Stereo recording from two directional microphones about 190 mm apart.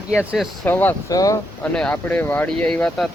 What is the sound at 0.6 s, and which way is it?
Speech, 10° left (ahead or behind).